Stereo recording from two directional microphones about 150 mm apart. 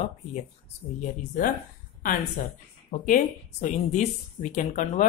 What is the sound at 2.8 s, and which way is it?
Speech, 60° left (ahead or behind).